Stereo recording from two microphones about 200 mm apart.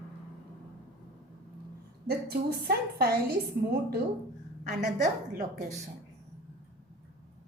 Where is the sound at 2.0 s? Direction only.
55° right (ahead or behind).